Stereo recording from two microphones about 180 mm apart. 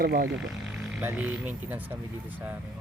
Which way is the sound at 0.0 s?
55° right (ahead or behind).